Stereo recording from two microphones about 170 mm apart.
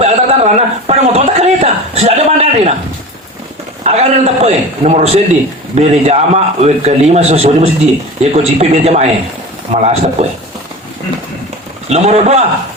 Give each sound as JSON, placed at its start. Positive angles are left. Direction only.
{"t": 0.0, "sound": "a sound", "side_deg": -40}
{"t": 3.8, "sound": "a man's voice", "side_deg": -40}
{"t": 11.9, "sound": "a man's voice", "side_deg": -40}